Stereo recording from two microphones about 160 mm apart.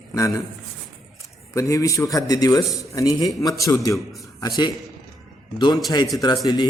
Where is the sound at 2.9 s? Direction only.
20° left (ahead or behind).